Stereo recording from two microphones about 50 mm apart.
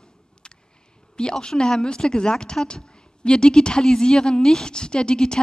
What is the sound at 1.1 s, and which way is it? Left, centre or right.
A woman's voice, centre.